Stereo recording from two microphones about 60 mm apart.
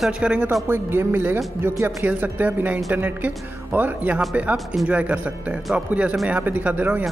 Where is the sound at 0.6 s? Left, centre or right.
Right.